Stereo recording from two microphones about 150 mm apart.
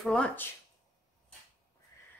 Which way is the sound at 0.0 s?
5° left (ahead or behind).